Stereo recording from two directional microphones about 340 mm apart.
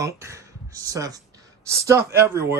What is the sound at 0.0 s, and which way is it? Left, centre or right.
Speech, centre.